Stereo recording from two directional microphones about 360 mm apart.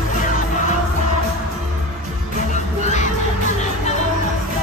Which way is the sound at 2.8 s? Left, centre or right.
Centre.